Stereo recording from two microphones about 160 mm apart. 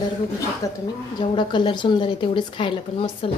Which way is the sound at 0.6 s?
20° left (ahead or behind).